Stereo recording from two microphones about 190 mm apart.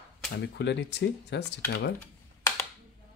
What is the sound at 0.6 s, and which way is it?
Speech, 65° left (ahead or behind).